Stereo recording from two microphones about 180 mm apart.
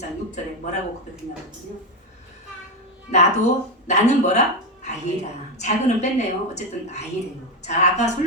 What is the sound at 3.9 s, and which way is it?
Speech, 40° left (ahead or behind).